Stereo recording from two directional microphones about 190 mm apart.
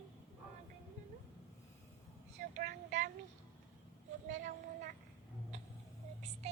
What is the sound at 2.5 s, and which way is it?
Child singing, 40° right (ahead or behind).